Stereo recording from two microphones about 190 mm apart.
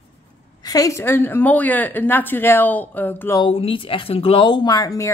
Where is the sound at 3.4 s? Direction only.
30° left (ahead or behind).